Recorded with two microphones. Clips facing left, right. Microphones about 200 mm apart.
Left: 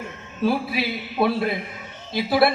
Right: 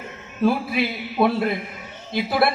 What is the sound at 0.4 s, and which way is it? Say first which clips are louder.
A man's voice: right 2 dB; 55° right (ahead or behind).